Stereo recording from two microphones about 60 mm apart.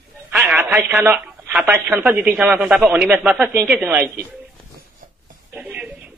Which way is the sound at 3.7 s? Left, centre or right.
Right.